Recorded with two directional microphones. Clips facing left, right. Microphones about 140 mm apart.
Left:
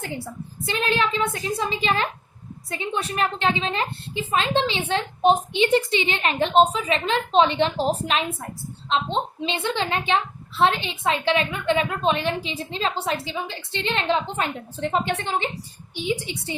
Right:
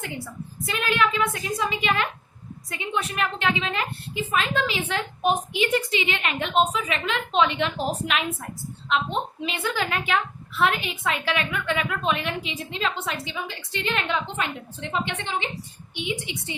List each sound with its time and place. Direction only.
0.6 s a child's voice: 30° left (ahead or behind)